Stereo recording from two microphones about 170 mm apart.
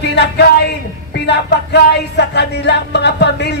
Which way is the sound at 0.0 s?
75° left (ahead or behind).